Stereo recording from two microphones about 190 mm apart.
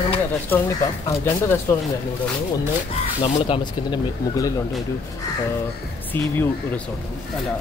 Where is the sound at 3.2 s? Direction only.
30° left (ahead or behind).